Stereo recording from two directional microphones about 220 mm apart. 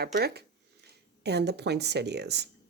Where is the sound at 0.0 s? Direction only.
45° right (ahead or behind).